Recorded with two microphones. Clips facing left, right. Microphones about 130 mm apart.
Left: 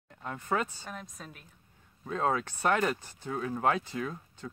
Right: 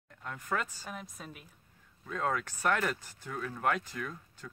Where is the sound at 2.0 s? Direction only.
30° left (ahead or behind).